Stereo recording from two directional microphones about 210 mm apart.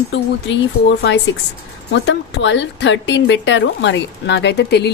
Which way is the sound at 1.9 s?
60° left (ahead or behind).